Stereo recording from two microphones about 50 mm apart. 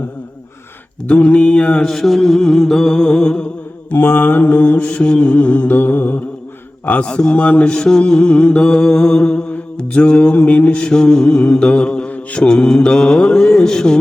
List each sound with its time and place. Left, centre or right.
1.0 s mantra: left
1.9 s mantra: centre
3.9 s mantra: left
7.0 s mantra: centre